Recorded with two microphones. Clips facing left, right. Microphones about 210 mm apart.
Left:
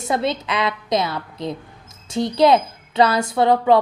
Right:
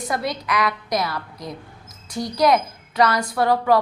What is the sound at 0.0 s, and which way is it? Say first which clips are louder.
A woman's voice: left 4 dB; 25° left (ahead or behind).